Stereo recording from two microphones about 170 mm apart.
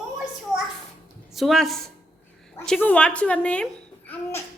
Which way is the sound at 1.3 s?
Centre (ahead or behind).